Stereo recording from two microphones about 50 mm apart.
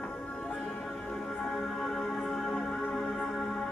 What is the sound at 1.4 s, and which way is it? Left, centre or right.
Music, centre.